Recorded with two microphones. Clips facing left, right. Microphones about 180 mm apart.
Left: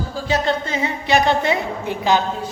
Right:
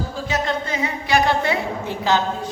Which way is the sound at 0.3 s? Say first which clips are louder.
Left 4 dB; 30° left (ahead or behind).